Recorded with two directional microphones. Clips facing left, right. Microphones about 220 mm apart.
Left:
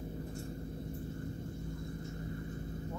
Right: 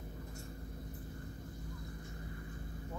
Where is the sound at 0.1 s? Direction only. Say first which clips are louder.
Left 7 dB; 30° left (ahead or behind).